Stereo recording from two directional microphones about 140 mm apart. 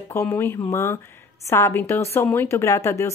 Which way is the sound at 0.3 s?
15° left (ahead or behind).